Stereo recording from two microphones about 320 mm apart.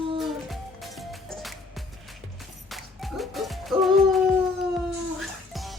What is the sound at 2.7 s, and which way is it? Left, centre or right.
Music, centre.